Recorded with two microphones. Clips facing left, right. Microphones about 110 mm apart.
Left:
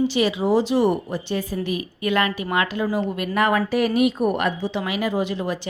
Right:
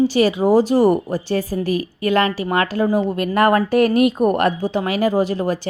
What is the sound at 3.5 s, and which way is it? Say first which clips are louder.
A woman's voice: right 6 dB; 45° right (ahead or behind).